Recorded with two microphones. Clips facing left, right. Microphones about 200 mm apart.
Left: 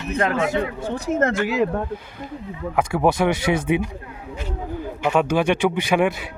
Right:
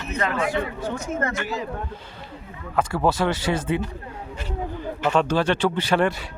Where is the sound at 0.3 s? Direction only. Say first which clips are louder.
Left 3 dB; 25° left (ahead or behind).